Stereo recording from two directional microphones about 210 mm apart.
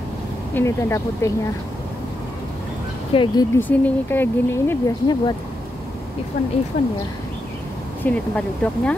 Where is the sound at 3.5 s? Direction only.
10° left (ahead or behind).